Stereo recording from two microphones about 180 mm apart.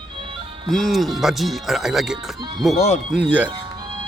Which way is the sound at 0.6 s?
Centre (ahead or behind).